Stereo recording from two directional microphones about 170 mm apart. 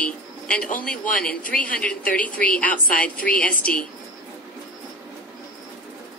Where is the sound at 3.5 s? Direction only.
55° left (ahead or behind).